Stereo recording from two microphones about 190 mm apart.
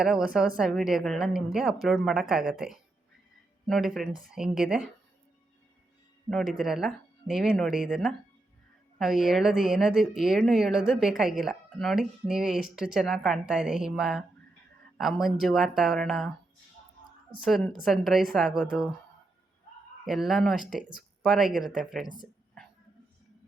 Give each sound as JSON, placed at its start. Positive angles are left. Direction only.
{"t": 0.0, "sound": "speech", "side_deg": 0}
{"t": 6.3, "sound": "speech", "side_deg": 0}
{"t": 17.4, "sound": "speech", "side_deg": 0}
{"t": 20.1, "sound": "speech", "side_deg": 0}
{"t": 22.0, "sound": "speech", "side_deg": 45}